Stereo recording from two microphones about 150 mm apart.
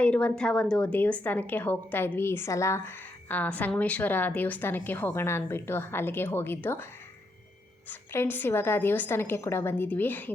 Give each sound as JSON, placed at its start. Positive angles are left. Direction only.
{"t": 0.0, "sound": "a woman's voice", "side_deg": 10}
{"t": 7.9, "sound": "a woman's voice", "side_deg": 15}